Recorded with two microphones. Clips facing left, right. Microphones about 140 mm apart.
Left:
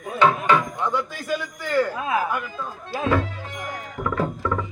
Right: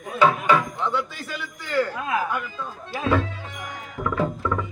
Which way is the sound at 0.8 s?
10° left (ahead or behind).